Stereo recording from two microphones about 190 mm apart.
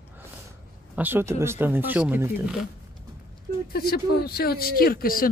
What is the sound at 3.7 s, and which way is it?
Speech, 55° left (ahead or behind).